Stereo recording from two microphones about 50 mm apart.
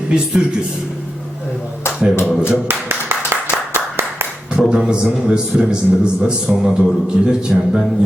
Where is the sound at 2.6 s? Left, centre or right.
Right.